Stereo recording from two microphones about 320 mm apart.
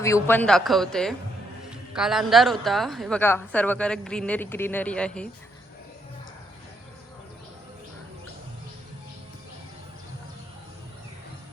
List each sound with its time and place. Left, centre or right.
0.0 s a woman's voice: centre